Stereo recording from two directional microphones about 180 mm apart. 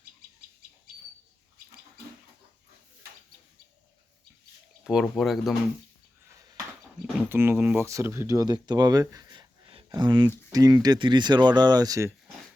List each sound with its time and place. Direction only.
4.8 s speech: 5° right (ahead or behind)
7.3 s speech: 10° right (ahead or behind)